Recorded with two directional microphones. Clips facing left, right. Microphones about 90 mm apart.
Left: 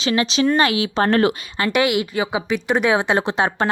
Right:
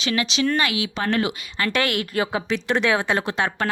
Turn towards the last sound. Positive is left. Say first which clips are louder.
# left 4 dB
turn(degrees=25)  # may be behind; listen again after turning